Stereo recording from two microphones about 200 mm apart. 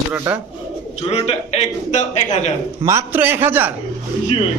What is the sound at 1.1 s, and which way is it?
A man's voice, 30° left (ahead or behind).